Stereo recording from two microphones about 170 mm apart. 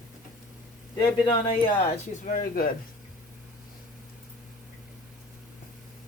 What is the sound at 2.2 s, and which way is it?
Speech, 55° left (ahead or behind).